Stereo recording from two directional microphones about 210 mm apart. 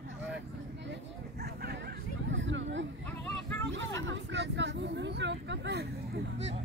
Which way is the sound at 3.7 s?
60° right (ahead or behind).